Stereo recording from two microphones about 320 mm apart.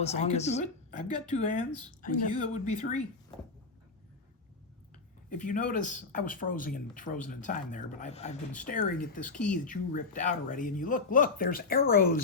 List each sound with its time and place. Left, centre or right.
0.0 s speech: centre
5.3 s speech: left
9.3 s speech: centre
9.6 s speech: left